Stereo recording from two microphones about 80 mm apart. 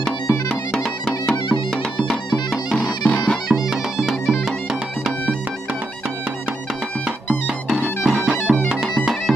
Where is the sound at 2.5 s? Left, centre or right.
Centre.